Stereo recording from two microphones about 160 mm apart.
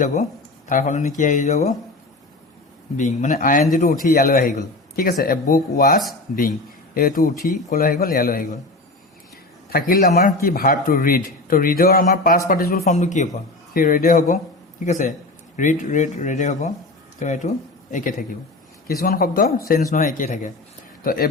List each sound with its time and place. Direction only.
0.0 s speech: 45° left (ahead or behind)
3.0 s speech: 50° left (ahead or behind); by 5.4 s 70° left (ahead or behind)
5.7 s speech: 60° left (ahead or behind)
9.6 s a man's voice: 65° left (ahead or behind)
12.8 s speech: 45° left (ahead or behind)
13.7 s speech: 60° left (ahead or behind)
14.8 s speech: 45° left (ahead or behind)
18.9 s a man's voice: 70° left (ahead or behind); by 20.5 s 55° left (ahead or behind)
21.0 s speech: 65° left (ahead or behind)